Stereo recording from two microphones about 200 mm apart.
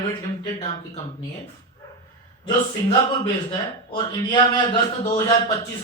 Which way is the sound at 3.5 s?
25° left (ahead or behind).